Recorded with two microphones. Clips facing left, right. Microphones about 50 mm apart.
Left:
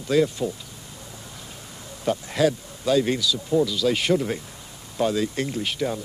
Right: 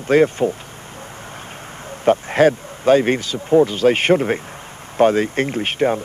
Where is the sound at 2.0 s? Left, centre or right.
Right.